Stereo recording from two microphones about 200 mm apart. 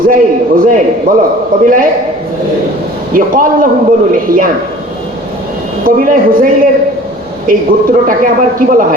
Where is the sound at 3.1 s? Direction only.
45° right (ahead or behind).